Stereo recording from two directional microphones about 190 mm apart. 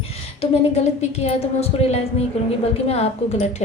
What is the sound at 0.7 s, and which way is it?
Speech, 35° left (ahead or behind).